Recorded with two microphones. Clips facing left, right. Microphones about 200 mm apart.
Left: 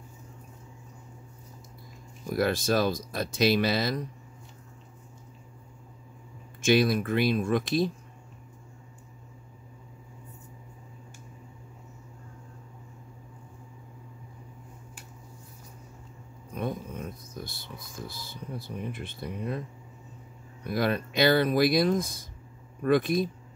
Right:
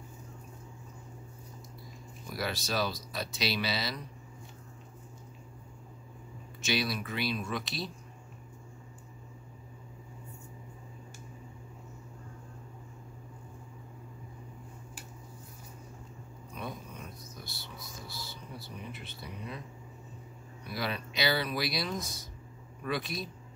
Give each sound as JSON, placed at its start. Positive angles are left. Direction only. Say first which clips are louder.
{"t": 2.2, "sound": "speech", "louder": "left 10 dB", "side_deg": 50}
{"t": 6.6, "sound": "speech", "louder": "left 10 dB", "side_deg": 50}
{"t": 16.5, "sound": "a sound", "louder": "left 9 dB", "side_deg": 50}
{"t": 20.6, "sound": "speech", "louder": "left 9 dB", "side_deg": 50}